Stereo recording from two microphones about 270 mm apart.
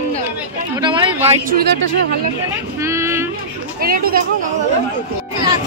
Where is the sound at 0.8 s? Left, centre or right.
Centre.